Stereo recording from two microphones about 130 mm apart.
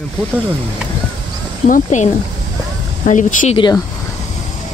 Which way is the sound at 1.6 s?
80° left.